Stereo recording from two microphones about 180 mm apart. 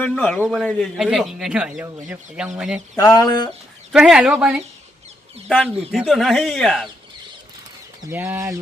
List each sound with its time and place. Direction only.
0.0 s a man's voice: 10° left (ahead or behind)
0.6 s speech: centre (ahead or behind)
2.9 s a sound: 20° left (ahead or behind)
3.9 s speech: 5° right (ahead or behind)
8.1 s speech: 10° right (ahead or behind)